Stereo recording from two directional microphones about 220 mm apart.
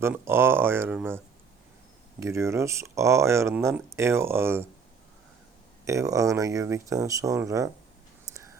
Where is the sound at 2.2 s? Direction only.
15° right (ahead or behind).